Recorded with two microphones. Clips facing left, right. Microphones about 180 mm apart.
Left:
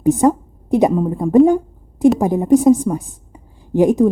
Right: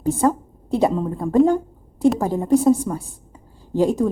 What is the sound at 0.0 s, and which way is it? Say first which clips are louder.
A woman's voice: left 5 dB; 15° left (ahead or behind).